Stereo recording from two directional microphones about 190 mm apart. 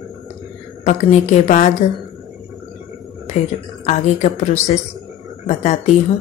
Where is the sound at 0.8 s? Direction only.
35° left (ahead or behind).